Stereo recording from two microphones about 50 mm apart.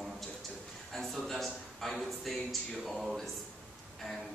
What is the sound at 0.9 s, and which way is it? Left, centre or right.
Speech, centre.